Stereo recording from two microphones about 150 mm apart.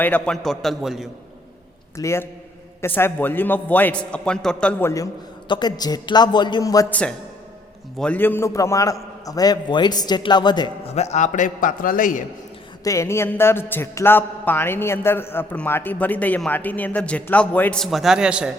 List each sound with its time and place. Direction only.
0.0 s a man's voice: 10° left (ahead or behind)
2.0 s a man's voice: 20° left (ahead or behind)
5.5 s a man's voice: 30° left (ahead or behind)
7.9 s a man's voice: 10° left (ahead or behind); by 10.7 s 30° left (ahead or behind)
10.9 s a man's voice: 45° left (ahead or behind); by 12.2 s 65° left (ahead or behind)
12.8 s a man's voice: 20° left (ahead or behind)
17.8 s a man's voice: centre (ahead or behind)